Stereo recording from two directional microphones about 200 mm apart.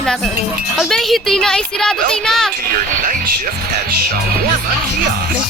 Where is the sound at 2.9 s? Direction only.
45° right (ahead or behind).